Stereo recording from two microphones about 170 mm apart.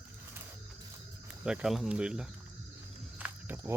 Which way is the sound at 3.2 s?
10° right (ahead or behind).